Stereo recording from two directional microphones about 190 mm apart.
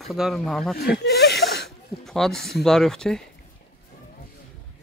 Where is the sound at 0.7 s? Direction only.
55° left (ahead or behind).